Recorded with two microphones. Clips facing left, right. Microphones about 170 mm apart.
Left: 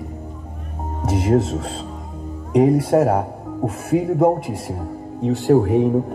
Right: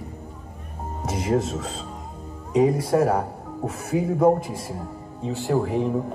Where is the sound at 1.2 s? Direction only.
50° left (ahead or behind).